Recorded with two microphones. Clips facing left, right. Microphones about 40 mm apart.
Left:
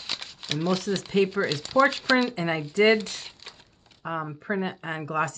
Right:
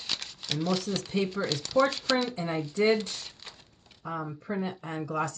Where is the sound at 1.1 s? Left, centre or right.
Left.